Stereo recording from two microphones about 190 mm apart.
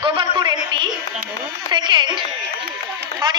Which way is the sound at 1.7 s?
25° right (ahead or behind).